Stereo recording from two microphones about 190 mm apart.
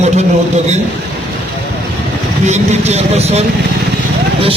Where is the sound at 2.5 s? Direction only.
35° right (ahead or behind).